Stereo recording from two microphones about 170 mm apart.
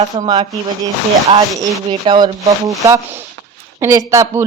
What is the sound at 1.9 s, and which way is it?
Speech, 25° right (ahead or behind).